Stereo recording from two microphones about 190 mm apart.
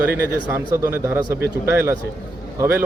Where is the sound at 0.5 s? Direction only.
15° right (ahead or behind).